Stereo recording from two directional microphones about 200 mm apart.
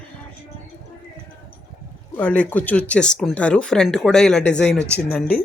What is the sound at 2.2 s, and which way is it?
Speech, 5° left (ahead or behind).